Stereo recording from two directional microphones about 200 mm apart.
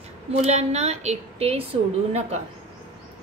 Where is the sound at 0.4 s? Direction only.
35° right (ahead or behind).